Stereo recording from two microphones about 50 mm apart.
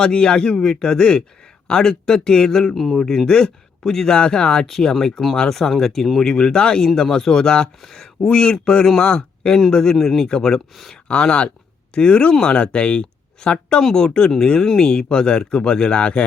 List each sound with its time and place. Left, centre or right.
0.0 s speech: centre